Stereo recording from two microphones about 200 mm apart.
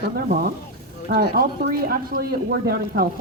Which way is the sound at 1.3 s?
45° right (ahead or behind).